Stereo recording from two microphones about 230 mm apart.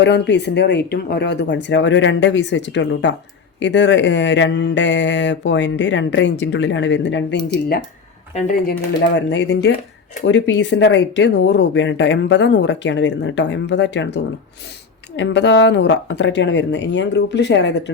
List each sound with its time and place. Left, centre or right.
0.0 s speech: left
9.0 s speech: left